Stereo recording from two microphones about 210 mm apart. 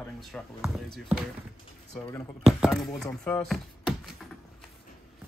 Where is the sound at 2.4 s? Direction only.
Centre (ahead or behind).